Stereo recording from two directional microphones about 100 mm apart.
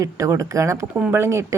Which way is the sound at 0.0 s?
35° right (ahead or behind).